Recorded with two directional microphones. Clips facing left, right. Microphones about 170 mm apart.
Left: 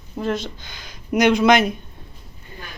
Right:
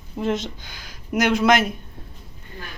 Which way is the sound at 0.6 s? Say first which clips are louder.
Left 4 dB; 5° right (ahead or behind).